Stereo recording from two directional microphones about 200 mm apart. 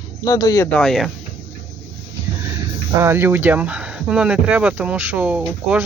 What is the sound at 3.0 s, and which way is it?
Speech, 10° right (ahead or behind).